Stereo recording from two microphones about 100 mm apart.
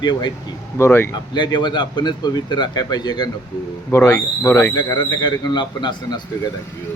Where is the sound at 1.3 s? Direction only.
50° left (ahead or behind).